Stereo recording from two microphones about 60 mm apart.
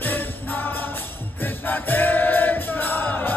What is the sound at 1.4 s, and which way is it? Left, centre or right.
Music, left.